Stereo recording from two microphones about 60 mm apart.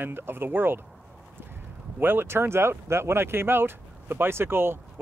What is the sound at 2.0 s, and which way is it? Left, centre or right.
Speech, right.